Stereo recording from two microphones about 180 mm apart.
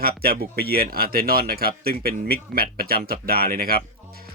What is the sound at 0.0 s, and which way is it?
Speech, 55° right (ahead or behind).